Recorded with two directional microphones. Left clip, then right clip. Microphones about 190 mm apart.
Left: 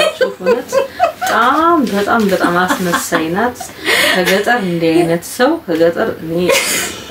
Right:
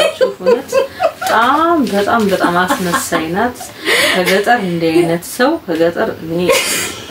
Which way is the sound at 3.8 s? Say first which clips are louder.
Even; 10° left (ahead or behind).